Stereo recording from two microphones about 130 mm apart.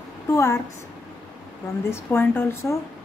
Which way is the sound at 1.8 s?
20° left (ahead or behind).